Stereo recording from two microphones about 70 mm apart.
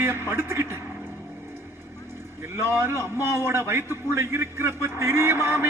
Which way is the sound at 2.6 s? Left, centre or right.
Right.